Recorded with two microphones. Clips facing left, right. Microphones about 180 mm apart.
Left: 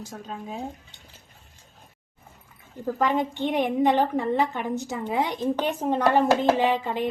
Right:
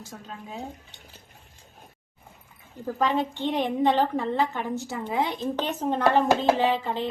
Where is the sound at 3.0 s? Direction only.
15° left (ahead or behind).